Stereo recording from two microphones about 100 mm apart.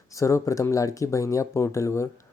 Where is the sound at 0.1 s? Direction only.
30° left (ahead or behind).